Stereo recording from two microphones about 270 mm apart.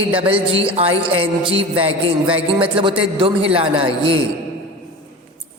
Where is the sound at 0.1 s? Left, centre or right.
Centre.